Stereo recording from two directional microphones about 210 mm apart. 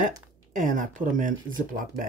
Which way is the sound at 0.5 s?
40° right (ahead or behind).